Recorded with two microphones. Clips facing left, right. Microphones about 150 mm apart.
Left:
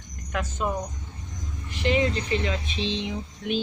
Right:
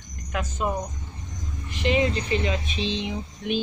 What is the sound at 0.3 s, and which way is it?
Speech, 10° right (ahead or behind).